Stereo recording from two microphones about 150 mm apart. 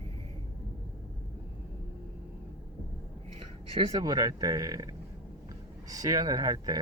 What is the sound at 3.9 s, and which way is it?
Speech, 25° right (ahead or behind).